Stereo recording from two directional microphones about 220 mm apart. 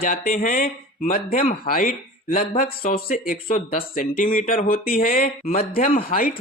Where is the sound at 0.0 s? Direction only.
40° left (ahead or behind).